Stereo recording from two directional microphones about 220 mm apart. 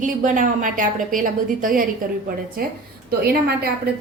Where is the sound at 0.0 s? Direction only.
35° right (ahead or behind).